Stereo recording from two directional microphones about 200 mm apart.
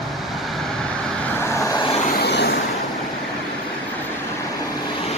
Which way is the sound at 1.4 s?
15° left (ahead or behind).